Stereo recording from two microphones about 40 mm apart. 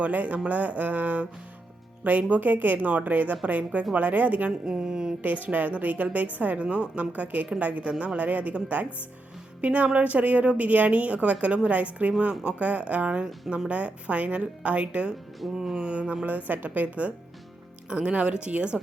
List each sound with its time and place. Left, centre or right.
0.0 s a woman's voice: right
2.3 s a woman's voice: right
4.6 s speech: centre
5.2 s a woman's voice: right
7.2 s a woman's voice: right
7.9 s speech: right
12.3 s speech: centre
12.5 s speech: right
15.5 s speech: centre
15.9 s speech: right
16.2 s speech: right